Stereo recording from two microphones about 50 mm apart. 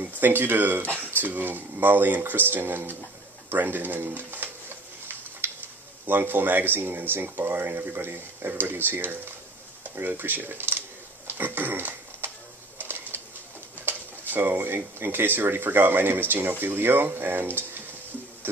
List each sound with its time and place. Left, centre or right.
0.2 s speech: right
5.4 s a sound: right
6.0 s speech: right
11.2 s a sound: right
12.7 s bird: right
14.3 s speech: right